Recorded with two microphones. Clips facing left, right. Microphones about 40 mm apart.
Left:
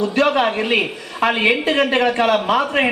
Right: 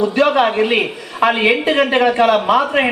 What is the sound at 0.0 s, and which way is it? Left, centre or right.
Speech, centre.